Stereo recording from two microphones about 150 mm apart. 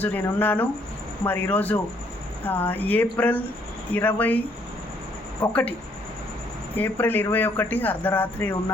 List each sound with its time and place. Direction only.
0.0 s speech: 10° left (ahead or behind)
5.4 s speech: 10° left (ahead or behind)
6.7 s speech: 10° left (ahead or behind)